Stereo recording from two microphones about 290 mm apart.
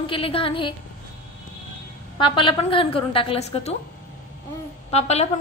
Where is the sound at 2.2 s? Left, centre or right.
Centre.